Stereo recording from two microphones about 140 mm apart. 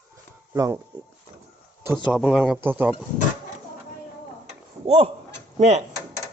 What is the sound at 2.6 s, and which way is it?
Speech, 15° right (ahead or behind).